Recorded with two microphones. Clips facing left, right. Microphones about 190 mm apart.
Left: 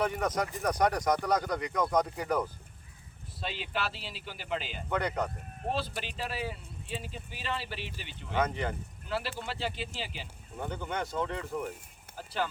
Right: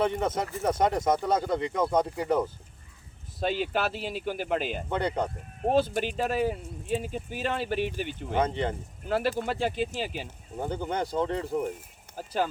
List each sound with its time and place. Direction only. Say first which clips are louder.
0.0 s speech: right 3 dB; 25° right (ahead or behind)
3.4 s speech: right 8 dB; 45° right (ahead or behind)
4.9 s speech: right 1 dB; 30° right (ahead or behind)
5.6 s speech: right 10 dB; 45° right (ahead or behind)
8.4 s speech: right 3 dB; 30° right (ahead or behind)
9.0 s speech: right 8 dB; 50° right (ahead or behind)
10.6 s speech: right 5 dB; 30° right (ahead or behind)